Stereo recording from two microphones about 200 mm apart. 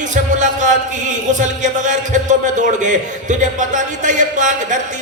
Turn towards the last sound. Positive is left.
turn(degrees=-40)  # may be behind; listen again after turning